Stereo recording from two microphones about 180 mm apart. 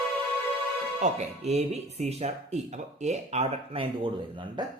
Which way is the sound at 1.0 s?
40° right (ahead or behind).